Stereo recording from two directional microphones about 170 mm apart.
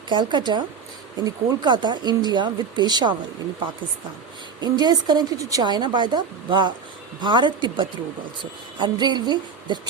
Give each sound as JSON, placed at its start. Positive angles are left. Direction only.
{"t": 0.1, "sound": "a woman's voice", "side_deg": -25}
{"t": 4.6, "sound": "a woman's voice", "side_deg": -25}